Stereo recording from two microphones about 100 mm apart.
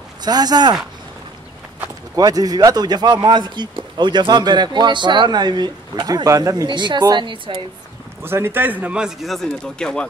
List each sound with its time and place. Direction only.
0.2 s speech: 40° right (ahead or behind)
2.1 s speech: 40° right (ahead or behind)
8.2 s speech: 25° right (ahead or behind); by 10.0 s 5° left (ahead or behind)